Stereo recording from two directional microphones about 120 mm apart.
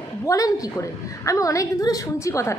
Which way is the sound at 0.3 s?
25° left (ahead or behind).